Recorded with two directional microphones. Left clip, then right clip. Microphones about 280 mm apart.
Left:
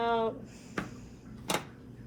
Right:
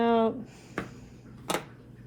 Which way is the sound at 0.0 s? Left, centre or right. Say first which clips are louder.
Right 5 dB; right.